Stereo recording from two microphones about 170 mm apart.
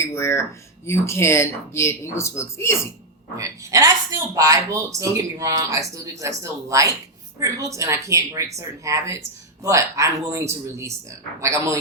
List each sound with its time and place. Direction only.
0.0 s a sound: 15° left (ahead or behind)
0.9 s speech: 15° left (ahead or behind)
3.3 s a woman's voice: 20° right (ahead or behind)